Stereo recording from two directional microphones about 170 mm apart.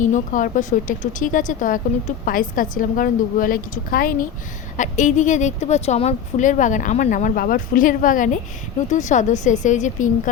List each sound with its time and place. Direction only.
0.0 s speech: 50° left (ahead or behind)